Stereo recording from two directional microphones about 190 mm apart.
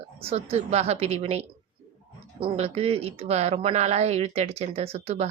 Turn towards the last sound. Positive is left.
turn(degrees=-35)  # may be behind; listen again after turning